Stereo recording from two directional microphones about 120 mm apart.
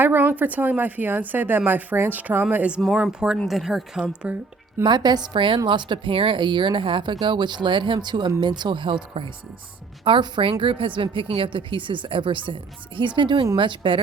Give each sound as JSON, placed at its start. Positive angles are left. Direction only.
{"t": 0.0, "sound": "a woman's voice", "side_deg": -15}
{"t": 4.8, "sound": "a woman's voice", "side_deg": -35}